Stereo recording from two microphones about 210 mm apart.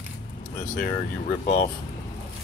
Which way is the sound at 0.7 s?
40° left (ahead or behind).